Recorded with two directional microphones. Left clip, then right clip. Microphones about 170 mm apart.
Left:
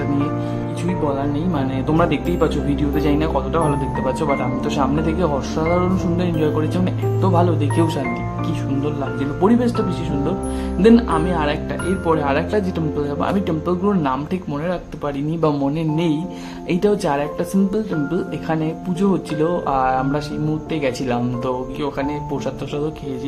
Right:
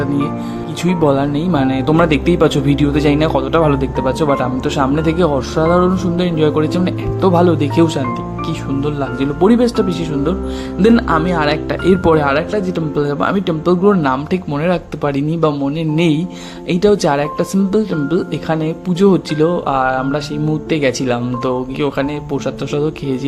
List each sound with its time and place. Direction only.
1.0 s speech: 35° right (ahead or behind)
10.8 s speech: 25° right (ahead or behind)
11.9 s speech: 35° right (ahead or behind)
12.2 s speech: 10° right (ahead or behind); by 15.1 s 30° right (ahead or behind)
16.6 s speech: 20° right (ahead or behind)
20.7 s speech: 25° right (ahead or behind)